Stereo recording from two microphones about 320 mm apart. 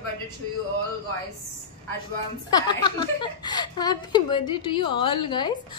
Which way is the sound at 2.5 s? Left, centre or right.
Centre.